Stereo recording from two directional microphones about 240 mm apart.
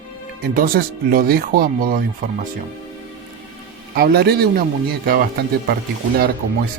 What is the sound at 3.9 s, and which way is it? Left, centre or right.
Speech, right.